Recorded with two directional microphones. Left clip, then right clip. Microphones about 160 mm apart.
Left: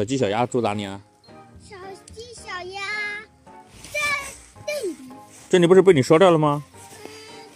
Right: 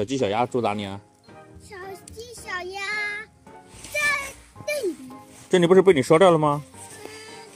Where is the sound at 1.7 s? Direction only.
40° right (ahead or behind).